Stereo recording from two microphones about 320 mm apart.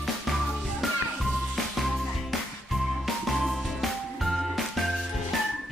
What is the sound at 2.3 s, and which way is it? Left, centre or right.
Music, centre.